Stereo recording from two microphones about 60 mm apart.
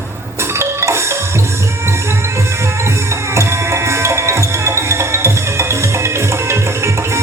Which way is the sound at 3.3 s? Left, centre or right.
Right.